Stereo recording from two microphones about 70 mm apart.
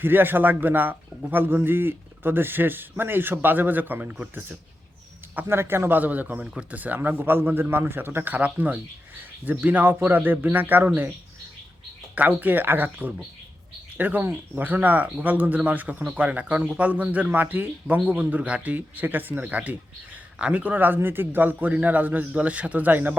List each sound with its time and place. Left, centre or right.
0.0 s a man's voice: right
12.1 s a man's voice: right